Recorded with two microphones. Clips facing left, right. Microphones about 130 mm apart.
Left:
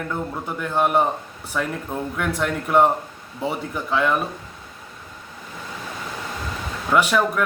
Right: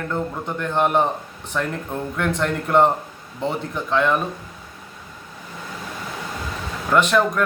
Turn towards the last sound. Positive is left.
turn(degrees=10)  # may be behind; listen again after turning